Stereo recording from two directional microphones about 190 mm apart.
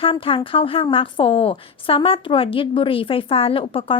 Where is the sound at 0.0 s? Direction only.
25° left (ahead or behind).